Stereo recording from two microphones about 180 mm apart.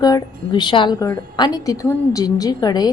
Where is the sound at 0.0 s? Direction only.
25° left (ahead or behind).